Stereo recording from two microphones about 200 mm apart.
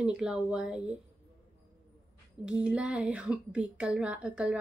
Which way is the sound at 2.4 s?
5° right (ahead or behind).